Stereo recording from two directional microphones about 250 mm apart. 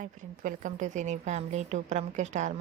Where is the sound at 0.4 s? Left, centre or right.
Right.